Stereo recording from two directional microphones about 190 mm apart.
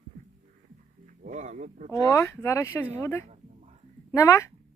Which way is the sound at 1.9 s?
15° left (ahead or behind).